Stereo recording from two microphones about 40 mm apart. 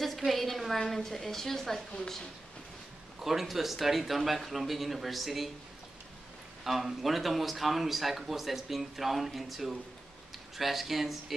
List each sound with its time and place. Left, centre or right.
0.3 s a woman's voice: centre
1.9 s speech: centre
3.2 s speech: centre
6.6 s speech: centre